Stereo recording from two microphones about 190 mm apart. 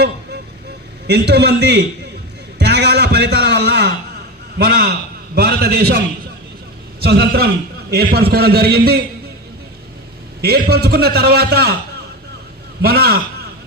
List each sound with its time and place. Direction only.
1.0 s a man's voice: 60° right (ahead or behind)
2.6 s a sound: 60° right (ahead or behind)
4.5 s a man's voice: 55° right (ahead or behind)
7.0 s a man's voice: 55° right (ahead or behind)
10.4 s a man's voice: 55° right (ahead or behind)
12.8 s a man's voice: 55° right (ahead or behind)